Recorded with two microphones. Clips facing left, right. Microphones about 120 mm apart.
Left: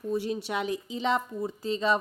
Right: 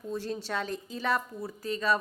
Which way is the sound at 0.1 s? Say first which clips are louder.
Left 4 dB; 15° left (ahead or behind).